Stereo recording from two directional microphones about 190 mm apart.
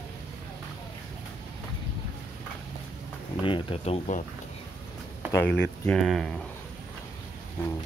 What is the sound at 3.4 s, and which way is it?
Speech, 30° left (ahead or behind).